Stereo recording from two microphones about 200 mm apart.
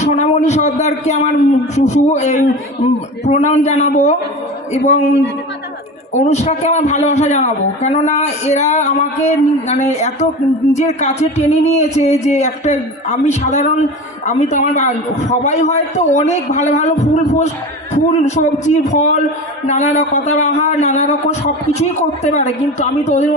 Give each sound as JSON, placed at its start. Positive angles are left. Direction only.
{"t": 0.0, "sound": "a man's voice", "side_deg": 35}
{"t": 6.1, "sound": "a man's voice", "side_deg": 35}
{"t": 18.1, "sound": "a man's voice", "side_deg": 35}